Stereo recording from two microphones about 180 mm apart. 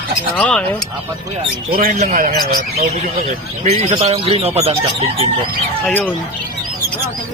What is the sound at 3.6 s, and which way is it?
Speech, 40° right (ahead or behind).